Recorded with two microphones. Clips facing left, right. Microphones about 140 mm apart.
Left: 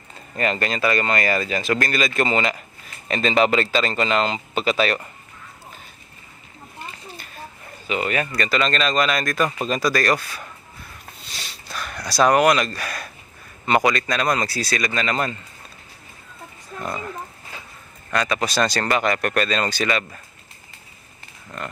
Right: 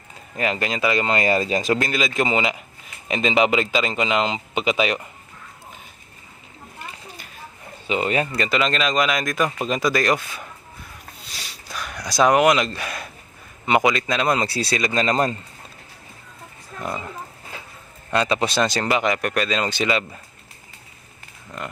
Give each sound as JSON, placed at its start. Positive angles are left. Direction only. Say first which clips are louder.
{"t": 0.3, "sound": "speech", "louder": "left 1 dB", "side_deg": -10}
{"t": 1.8, "sound": "speech", "louder": "even", "side_deg": -20}
{"t": 7.9, "sound": "speech", "louder": "right 2 dB", "side_deg": -25}
{"t": 8.5, "sound": "speech", "louder": "even", "side_deg": -10}
{"t": 11.3, "sound": "a sound", "louder": "left 1 dB", "side_deg": -10}
{"t": 13.7, "sound": "speech", "louder": "even", "side_deg": -15}
{"t": 16.8, "sound": "speech", "louder": "even", "side_deg": -15}